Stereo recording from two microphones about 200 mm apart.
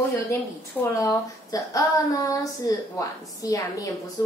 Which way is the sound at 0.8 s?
15° left (ahead or behind).